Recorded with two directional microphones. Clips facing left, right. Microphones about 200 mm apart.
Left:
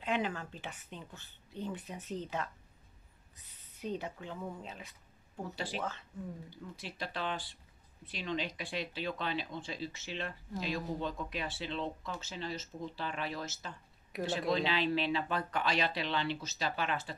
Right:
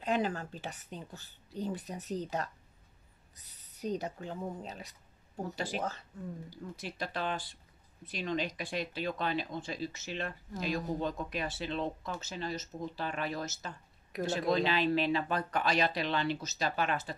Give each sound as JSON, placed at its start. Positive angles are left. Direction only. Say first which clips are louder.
{"t": 0.0, "sound": "a woman's voice", "louder": "right 3 dB", "side_deg": -40}